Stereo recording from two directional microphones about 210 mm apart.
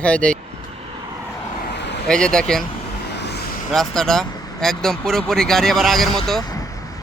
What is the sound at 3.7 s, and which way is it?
Speech, centre (ahead or behind).